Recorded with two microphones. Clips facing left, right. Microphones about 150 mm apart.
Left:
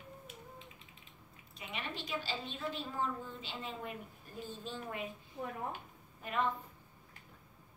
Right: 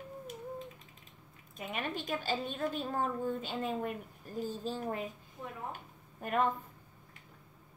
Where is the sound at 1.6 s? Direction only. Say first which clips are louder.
Right 6 dB; 50° right (ahead or behind).